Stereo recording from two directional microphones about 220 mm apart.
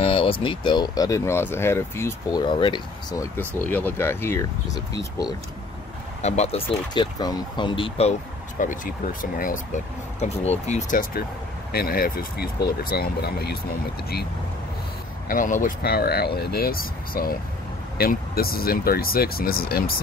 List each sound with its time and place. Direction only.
0.0 s speech: 25° left (ahead or behind)
6.2 s speech: 30° left (ahead or behind)
6.9 s speech: 20° left (ahead or behind)
8.5 s speech: 35° left (ahead or behind)
15.2 s speech: 35° left (ahead or behind)